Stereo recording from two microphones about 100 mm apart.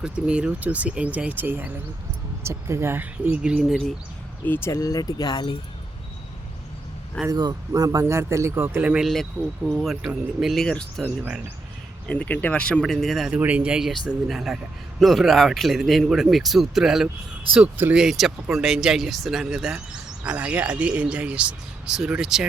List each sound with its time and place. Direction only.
0.0 s speech: 10° right (ahead or behind)
4.4 s speech: 25° left (ahead or behind); by 5.5 s 50° left (ahead or behind)
7.3 s speech: 40° right (ahead or behind)
8.8 s a man's voice: 5° right (ahead or behind)
11.0 s speech: 10° right (ahead or behind)
12.0 s speech: 10° left (ahead or behind)
12.8 s a man's voice: centre (ahead or behind)
13.3 s a man's voice: 15° right (ahead or behind)